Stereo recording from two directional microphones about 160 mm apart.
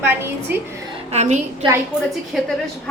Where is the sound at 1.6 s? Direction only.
30° right (ahead or behind).